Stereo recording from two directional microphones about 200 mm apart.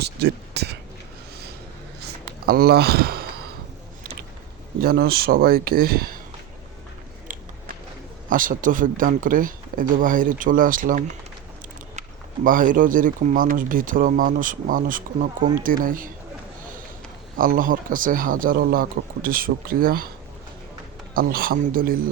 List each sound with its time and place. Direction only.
0.0 s speech: 55° right (ahead or behind)
2.5 s speech: 50° right (ahead or behind)
4.8 s speech: 50° right (ahead or behind)
7.3 s a sound: 40° right (ahead or behind)
8.3 s speech: 40° right (ahead or behind)
17.3 s speech: 45° right (ahead or behind)
21.1 s speech: 45° right (ahead or behind)